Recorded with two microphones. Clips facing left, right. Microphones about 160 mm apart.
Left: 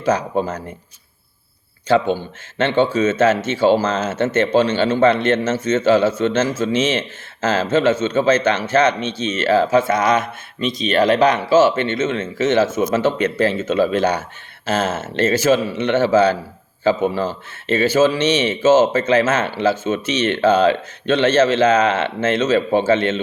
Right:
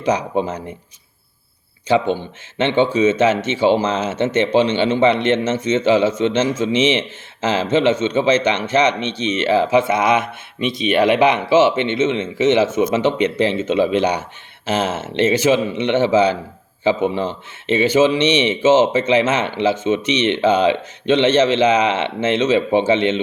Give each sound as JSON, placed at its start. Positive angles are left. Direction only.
{"t": 0.0, "sound": "a man's voice", "side_deg": -15}
{"t": 1.9, "sound": "a man's voice", "side_deg": -15}